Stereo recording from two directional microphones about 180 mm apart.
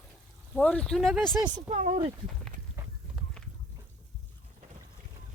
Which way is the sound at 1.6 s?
40° right (ahead or behind).